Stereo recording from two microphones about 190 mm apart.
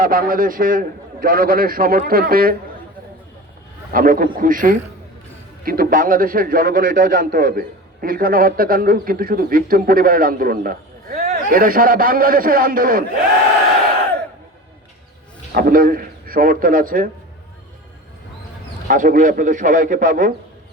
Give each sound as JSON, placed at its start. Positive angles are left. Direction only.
{"t": 0.0, "sound": "a man's voice", "side_deg": -50}
{"t": 3.9, "sound": "a man's voice", "side_deg": -50}
{"t": 15.5, "sound": "a man's voice", "side_deg": -50}
{"t": 18.9, "sound": "a man's voice", "side_deg": -45}